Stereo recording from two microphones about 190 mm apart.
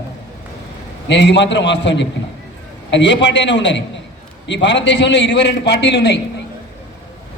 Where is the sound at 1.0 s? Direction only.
65° left (ahead or behind).